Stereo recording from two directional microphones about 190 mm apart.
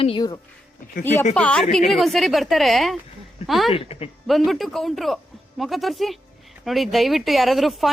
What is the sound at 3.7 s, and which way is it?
Speech, 30° left (ahead or behind).